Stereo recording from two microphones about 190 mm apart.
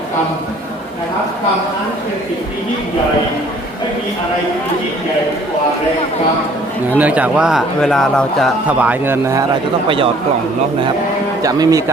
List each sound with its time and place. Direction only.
6.9 s speech: 10° right (ahead or behind)
11.4 s speech: 20° right (ahead or behind)